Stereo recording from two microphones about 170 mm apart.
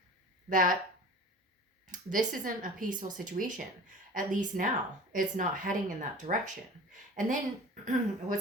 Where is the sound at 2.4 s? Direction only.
50° right (ahead or behind).